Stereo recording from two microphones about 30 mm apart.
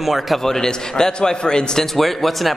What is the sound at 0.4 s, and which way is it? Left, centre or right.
A man's voice, centre.